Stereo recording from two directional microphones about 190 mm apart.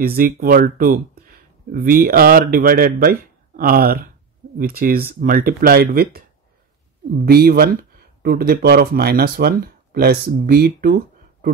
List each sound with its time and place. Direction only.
0.0 s speech: 50° right (ahead or behind)
7.2 s speech: 55° right (ahead or behind)